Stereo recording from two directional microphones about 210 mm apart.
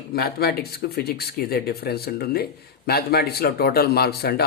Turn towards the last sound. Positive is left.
turn(degrees=50)  # may be behind; listen again after turning